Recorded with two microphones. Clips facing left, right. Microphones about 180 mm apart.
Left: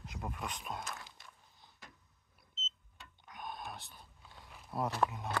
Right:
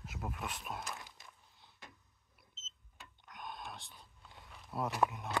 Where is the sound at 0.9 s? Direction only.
15° right (ahead or behind).